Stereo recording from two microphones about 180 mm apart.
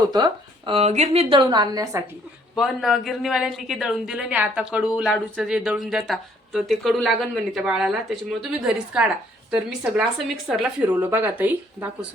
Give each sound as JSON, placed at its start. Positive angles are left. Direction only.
{"t": 0.1, "sound": "a woman's voice", "side_deg": -25}
{"t": 2.6, "sound": "speech", "side_deg": 0}